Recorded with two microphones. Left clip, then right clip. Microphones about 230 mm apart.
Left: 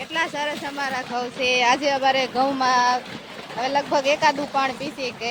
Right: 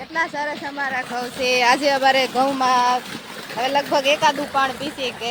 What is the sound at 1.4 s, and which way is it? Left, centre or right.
Speech, centre.